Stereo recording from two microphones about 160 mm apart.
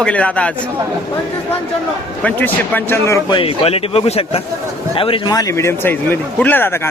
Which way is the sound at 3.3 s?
35° left (ahead or behind).